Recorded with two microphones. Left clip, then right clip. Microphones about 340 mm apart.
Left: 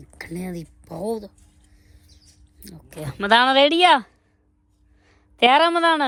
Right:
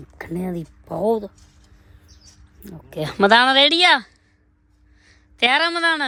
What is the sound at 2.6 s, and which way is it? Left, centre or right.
Speech, centre.